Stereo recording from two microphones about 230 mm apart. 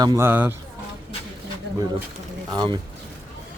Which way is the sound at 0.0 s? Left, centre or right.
Centre.